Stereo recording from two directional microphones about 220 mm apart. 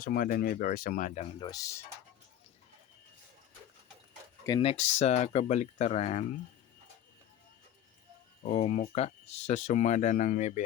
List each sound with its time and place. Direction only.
0.0 s speech: 40° left (ahead or behind)
1.5 s speech: 15° left (ahead or behind)
4.4 s speech: 25° left (ahead or behind)
8.4 s speech: 30° left (ahead or behind)